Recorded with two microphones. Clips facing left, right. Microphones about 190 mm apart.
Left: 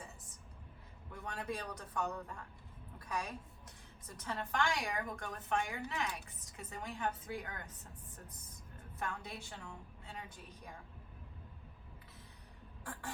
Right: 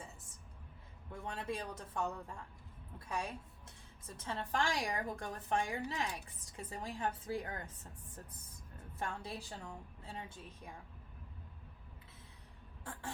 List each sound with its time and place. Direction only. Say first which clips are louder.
1.1 s a man's voice: right 1 dB; 25° right (ahead or behind)
9.0 s a woman's voice: right 1 dB; 30° right (ahead or behind)
12.8 s a sound: left 1 dB; 25° right (ahead or behind)